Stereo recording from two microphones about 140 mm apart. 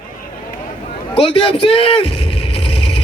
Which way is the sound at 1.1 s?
40° left (ahead or behind).